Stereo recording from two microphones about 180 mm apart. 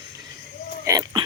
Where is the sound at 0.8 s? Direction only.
20° right (ahead or behind).